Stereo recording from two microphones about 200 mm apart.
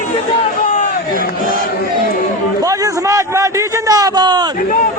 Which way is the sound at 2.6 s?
15° right (ahead or behind).